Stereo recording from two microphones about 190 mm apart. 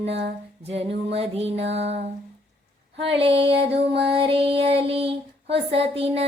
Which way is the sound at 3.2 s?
30° right (ahead or behind).